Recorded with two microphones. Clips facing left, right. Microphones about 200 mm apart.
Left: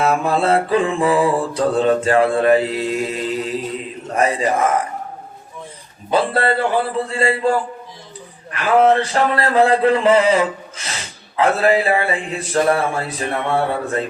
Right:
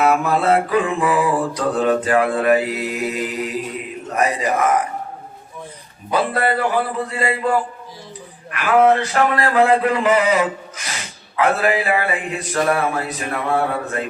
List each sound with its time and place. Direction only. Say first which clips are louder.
0.0 s mantra: even; 25° left (ahead or behind)
6.1 s mantra: left 2 dB; 30° left (ahead or behind)
8.5 s mantra: left 1 dB; 25° left (ahead or behind)